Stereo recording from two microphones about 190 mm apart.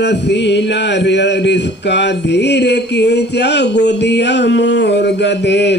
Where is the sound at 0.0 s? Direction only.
65° left (ahead or behind).